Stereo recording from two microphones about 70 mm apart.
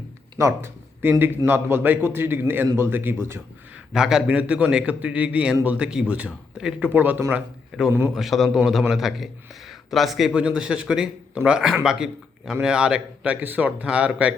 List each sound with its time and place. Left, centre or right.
0.3 s speech: right
1.0 s a man's voice: right
3.9 s speech: centre
6.8 s a man's voice: right
8.1 s a man's voice: centre